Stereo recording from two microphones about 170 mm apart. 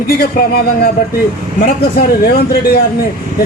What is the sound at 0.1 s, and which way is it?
Speech, 60° left (ahead or behind).